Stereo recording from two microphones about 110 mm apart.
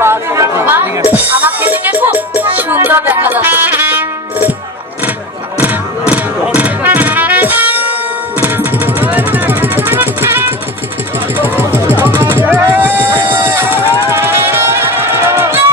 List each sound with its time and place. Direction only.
0.0 s music: 25° right (ahead or behind)
5.6 s music: 15° right (ahead or behind)